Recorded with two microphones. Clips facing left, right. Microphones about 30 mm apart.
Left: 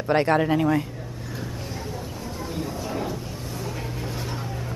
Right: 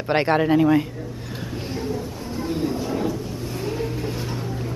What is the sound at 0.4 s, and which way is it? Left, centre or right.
Speech, centre.